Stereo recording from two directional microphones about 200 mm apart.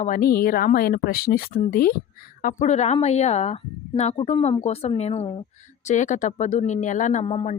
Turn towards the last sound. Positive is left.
turn(degrees=30)  # may be behind; listen again after turning